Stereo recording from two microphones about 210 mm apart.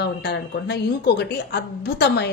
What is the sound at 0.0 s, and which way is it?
Speech, 50° left (ahead or behind).